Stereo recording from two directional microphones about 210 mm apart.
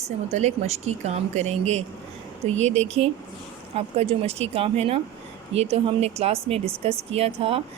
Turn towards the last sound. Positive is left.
turn(degrees=-25)  # may be behind; listen again after turning